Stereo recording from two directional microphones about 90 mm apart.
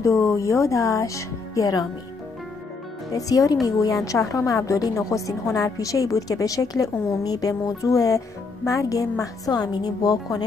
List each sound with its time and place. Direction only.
0.0 s a woman's voice: 35° left (ahead or behind)
3.1 s a woman's voice: 40° left (ahead or behind)